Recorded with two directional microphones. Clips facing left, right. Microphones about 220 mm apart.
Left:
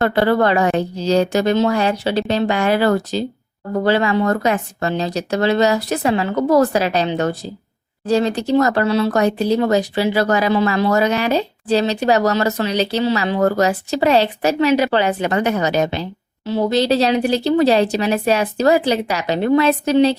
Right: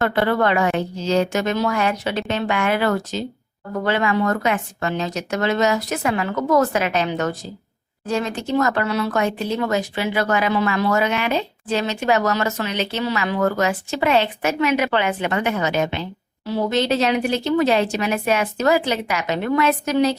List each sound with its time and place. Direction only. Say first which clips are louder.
0.0 s speech: left 4 dB; 30° left (ahead or behind)